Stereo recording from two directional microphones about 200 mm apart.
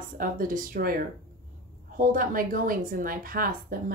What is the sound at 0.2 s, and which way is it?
A woman's voice, 45° right (ahead or behind).